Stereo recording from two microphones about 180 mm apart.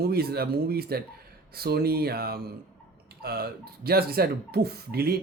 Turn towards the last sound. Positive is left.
turn(degrees=-60)  # may be behind; listen again after turning